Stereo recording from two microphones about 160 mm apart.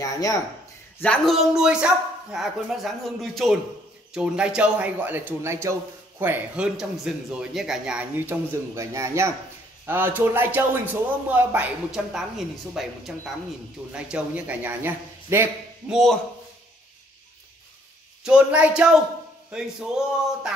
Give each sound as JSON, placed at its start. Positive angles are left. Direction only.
{"t": 0.0, "sound": "speech", "side_deg": 20}
{"t": 1.0, "sound": "a man's voice", "side_deg": 5}
{"t": 15.9, "sound": "speech", "side_deg": 0}
{"t": 18.2, "sound": "a man's voice", "side_deg": -5}